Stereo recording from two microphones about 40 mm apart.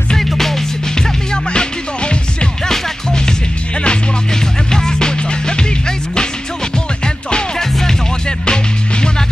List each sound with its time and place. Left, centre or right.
0.2 s music: centre
0.9 s music: centre
7.5 s music: centre